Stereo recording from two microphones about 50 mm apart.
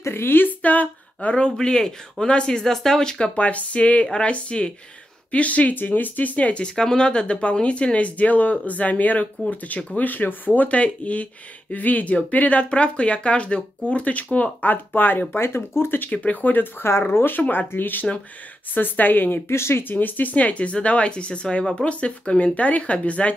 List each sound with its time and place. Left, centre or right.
0.1 s speech: left
0.6 s speech: left
1.3 s speech: centre
3.3 s speech: left
15.3 s speech: left
16.1 s speech: left
17.1 s speech: left
19.5 s speech: left
19.8 s speech: left